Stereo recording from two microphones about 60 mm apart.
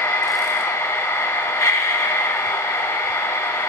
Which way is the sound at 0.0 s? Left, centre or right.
Left.